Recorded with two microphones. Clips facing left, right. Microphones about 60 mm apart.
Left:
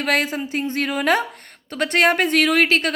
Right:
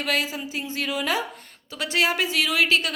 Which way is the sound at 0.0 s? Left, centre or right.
Left.